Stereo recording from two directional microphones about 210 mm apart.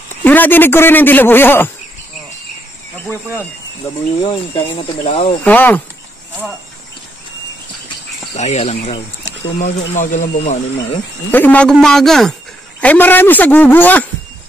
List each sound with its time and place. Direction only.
0.2 s a man's voice: 10° left (ahead or behind)
4.2 s speech: 25° left (ahead or behind)
5.4 s a man's voice: 10° left (ahead or behind)
8.4 s speech: 30° left (ahead or behind)
11.3 s a man's voice: 5° left (ahead or behind)